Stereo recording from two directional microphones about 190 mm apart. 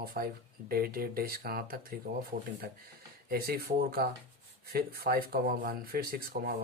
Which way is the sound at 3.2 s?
50° right (ahead or behind).